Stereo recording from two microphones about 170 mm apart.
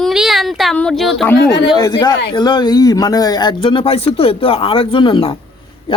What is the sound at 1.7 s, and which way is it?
A man's voice, 25° left (ahead or behind).